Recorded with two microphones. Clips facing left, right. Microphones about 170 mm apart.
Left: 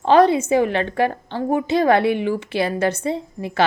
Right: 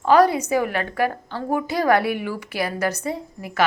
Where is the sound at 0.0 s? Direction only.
25° left (ahead or behind).